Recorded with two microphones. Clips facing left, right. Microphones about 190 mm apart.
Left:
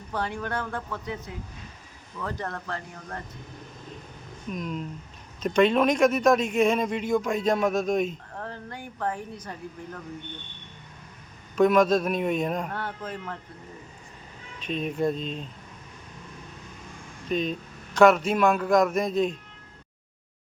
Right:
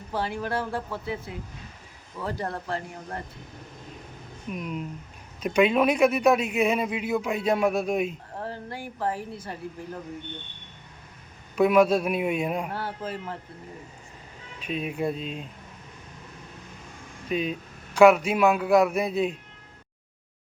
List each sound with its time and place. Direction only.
0.1 s speech: 5° right (ahead or behind)
2.2 s speech: 30° right (ahead or behind)
4.5 s speech: 5° right (ahead or behind)
8.4 s a sound: 30° right (ahead or behind)
8.7 s speech: 5° right (ahead or behind)
9.4 s speech: 25° right (ahead or behind)
11.5 s speech: 10° right (ahead or behind)
12.7 s speech: 30° right (ahead or behind)
14.6 s speech: 10° right (ahead or behind)
17.2 s speech: 10° right (ahead or behind)